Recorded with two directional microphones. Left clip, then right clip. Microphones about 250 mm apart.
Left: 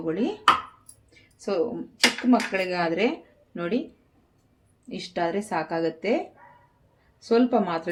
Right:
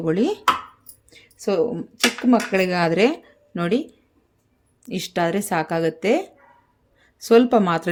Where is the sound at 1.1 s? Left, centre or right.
Right.